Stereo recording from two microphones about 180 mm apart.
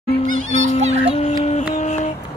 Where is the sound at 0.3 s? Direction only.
40° right (ahead or behind).